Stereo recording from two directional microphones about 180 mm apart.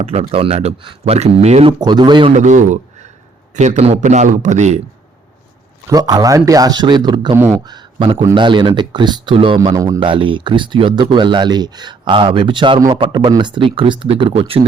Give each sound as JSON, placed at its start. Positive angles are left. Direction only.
{"t": 0.0, "sound": "speech", "side_deg": -35}
{"t": 1.8, "sound": "speech", "side_deg": -25}
{"t": 2.3, "sound": "a man's voice", "side_deg": -40}
{"t": 5.9, "sound": "speech", "side_deg": -20}
{"t": 9.7, "sound": "speech", "side_deg": -20}
{"t": 10.1, "sound": "speech", "side_deg": -30}